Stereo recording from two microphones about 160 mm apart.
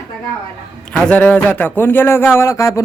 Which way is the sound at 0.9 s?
10° left (ahead or behind).